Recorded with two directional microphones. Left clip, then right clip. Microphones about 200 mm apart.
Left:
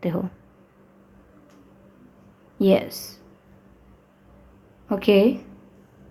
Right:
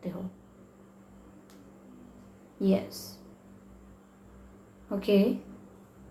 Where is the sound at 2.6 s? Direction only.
45° left (ahead or behind).